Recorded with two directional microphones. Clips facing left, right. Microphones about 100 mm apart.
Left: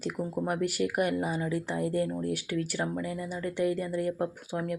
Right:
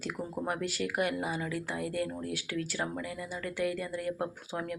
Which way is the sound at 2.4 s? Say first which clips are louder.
Left 3 dB; 15° left (ahead or behind).